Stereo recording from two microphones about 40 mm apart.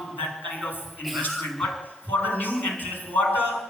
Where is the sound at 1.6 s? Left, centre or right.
Centre.